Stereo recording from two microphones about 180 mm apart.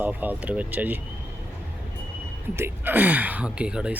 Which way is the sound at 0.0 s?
10° right (ahead or behind).